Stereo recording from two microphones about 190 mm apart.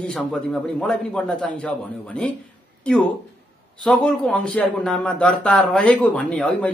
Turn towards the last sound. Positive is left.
turn(degrees=5)  # may be behind; listen again after turning